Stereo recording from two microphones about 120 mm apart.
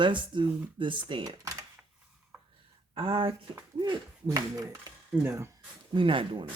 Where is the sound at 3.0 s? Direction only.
45° right (ahead or behind).